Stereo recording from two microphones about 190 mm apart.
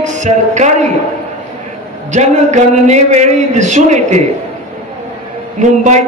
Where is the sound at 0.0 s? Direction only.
40° right (ahead or behind).